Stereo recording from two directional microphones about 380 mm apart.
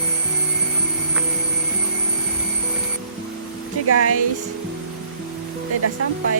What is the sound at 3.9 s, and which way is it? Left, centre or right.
Speech, right.